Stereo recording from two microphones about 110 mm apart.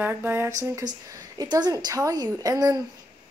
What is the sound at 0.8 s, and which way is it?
Speech, 40° right (ahead or behind).